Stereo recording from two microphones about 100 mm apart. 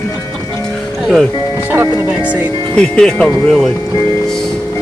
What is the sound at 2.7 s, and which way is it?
Speech, 5° left (ahead or behind).